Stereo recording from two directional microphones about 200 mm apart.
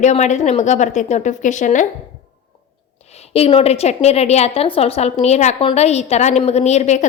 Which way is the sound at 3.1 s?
30° left (ahead or behind).